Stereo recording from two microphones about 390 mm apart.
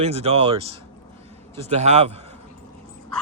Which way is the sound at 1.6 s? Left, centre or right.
Centre.